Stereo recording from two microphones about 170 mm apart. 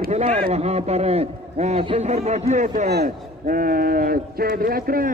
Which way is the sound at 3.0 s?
55° right (ahead or behind).